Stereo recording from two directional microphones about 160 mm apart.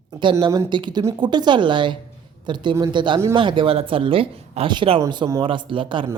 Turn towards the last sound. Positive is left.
turn(degrees=-30)  # may be behind; listen again after turning